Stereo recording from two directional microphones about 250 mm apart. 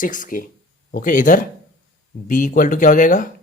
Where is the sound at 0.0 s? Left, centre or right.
Left.